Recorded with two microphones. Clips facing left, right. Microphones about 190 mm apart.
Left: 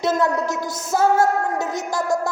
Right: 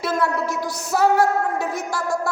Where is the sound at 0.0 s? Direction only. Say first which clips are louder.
Left 2 dB; 20° left (ahead or behind).